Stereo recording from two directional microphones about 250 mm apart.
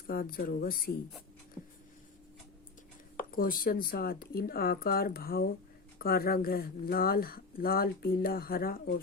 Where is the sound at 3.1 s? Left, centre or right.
Left.